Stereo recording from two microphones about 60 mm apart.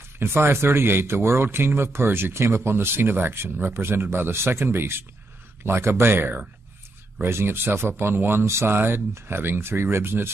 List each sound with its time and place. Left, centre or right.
0.2 s speech: right
6.1 s speech: right